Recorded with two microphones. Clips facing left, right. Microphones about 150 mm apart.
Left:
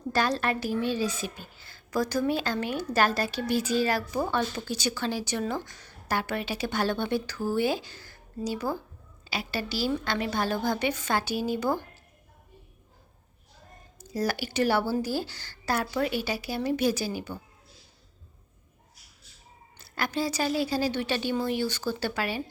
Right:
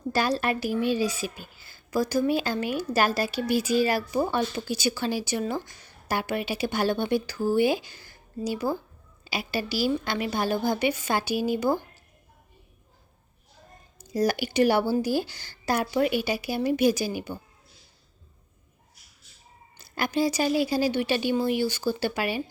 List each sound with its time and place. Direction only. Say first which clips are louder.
0.1 s a woman's voice: right 1 dB; 10° right (ahead or behind)
14.0 s a woman's voice: right 4 dB; 15° right (ahead or behind)
19.8 s a woman's voice: right 4 dB; 15° right (ahead or behind)